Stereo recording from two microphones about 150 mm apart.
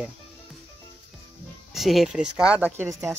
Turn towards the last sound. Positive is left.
turn(degrees=-20)  # may be behind; listen again after turning